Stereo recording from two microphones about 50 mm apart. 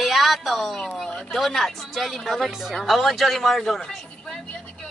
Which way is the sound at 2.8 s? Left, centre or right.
Centre.